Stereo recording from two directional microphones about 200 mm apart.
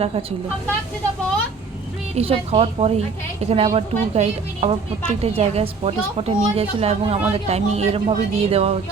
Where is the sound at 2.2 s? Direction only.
30° right (ahead or behind).